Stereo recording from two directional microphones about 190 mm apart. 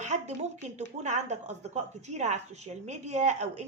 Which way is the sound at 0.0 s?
40° right (ahead or behind).